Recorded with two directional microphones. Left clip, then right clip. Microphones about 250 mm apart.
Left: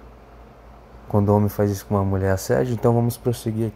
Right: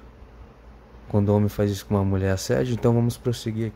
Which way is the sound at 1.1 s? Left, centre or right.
Right.